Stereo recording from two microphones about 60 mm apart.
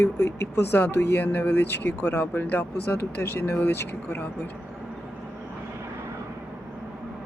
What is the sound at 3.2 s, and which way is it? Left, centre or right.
Speech, left.